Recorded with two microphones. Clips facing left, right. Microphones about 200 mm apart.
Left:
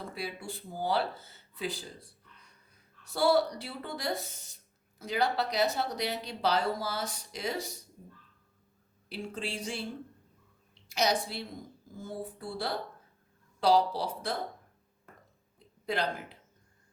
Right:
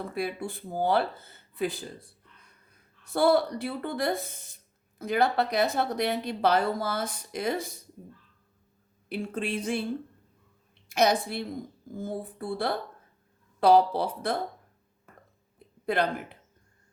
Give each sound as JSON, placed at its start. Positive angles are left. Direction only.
{"t": 0.1, "sound": "a woman's voice", "side_deg": -55}
{"t": 9.0, "sound": "speech", "side_deg": -55}
{"t": 10.8, "sound": "a woman's voice", "side_deg": -55}
{"t": 15.5, "sound": "a sound", "side_deg": -55}